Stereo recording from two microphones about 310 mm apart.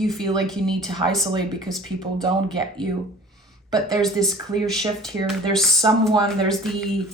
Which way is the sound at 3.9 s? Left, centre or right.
Centre.